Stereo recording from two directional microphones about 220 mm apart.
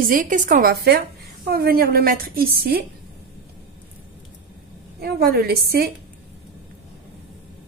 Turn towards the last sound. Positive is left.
turn(degrees=-45)  # may be behind; listen again after turning